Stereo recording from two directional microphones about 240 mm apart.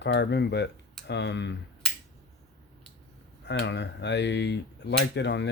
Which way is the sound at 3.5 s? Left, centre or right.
Left.